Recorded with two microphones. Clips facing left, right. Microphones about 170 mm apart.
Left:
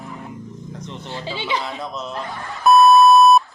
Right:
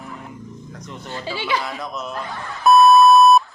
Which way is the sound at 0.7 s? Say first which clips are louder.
Left 2 dB; 25° left (ahead or behind).